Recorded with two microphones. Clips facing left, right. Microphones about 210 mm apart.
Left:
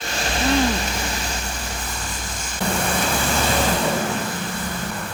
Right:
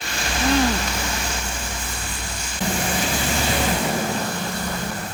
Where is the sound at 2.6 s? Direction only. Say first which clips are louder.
Left 1 dB; 55° left (ahead or behind).